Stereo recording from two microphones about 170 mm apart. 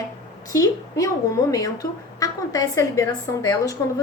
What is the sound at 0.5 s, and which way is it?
Speech, 20° left (ahead or behind).